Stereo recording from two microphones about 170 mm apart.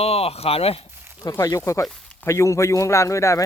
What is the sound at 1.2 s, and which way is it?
Speech, 20° left (ahead or behind).